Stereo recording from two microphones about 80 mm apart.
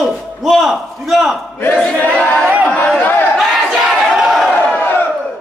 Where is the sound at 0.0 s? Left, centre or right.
Centre.